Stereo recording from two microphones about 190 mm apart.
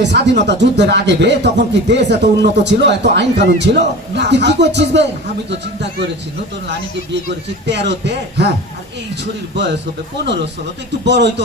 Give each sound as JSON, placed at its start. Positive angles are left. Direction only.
{"t": 0.0, "sound": "speech", "side_deg": -65}
{"t": 7.7, "sound": "speech", "side_deg": -65}
{"t": 11.0, "sound": "speech", "side_deg": -65}